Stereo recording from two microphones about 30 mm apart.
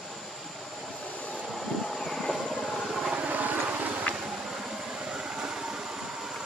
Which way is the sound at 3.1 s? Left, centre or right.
Right.